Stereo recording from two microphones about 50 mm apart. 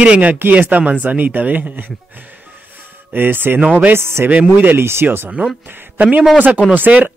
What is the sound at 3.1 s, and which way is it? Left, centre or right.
Speech, right.